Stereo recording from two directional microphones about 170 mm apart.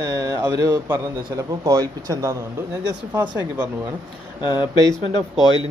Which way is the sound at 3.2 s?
10° right (ahead or behind).